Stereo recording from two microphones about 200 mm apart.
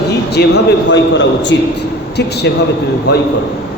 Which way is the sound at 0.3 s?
55° left (ahead or behind).